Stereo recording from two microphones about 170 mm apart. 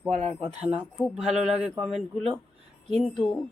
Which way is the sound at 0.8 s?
10° left (ahead or behind).